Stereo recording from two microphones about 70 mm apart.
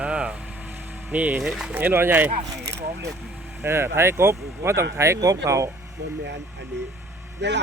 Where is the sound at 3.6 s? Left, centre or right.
Right.